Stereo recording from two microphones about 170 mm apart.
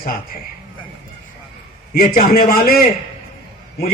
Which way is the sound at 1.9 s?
55° left (ahead or behind).